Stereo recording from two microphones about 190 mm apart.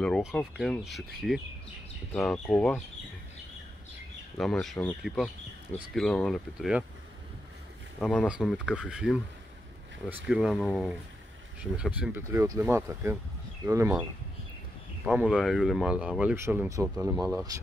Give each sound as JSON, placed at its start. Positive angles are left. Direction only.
{"t": 0.0, "sound": "speech", "side_deg": 0}
{"t": 4.4, "sound": "speech", "side_deg": 0}
{"t": 8.0, "sound": "speech", "side_deg": 0}
{"t": 15.0, "sound": "speech", "side_deg": -5}
{"t": 16.9, "sound": "speech", "side_deg": -5}